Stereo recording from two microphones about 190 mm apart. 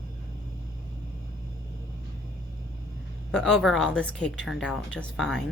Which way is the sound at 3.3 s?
5° left (ahead or behind).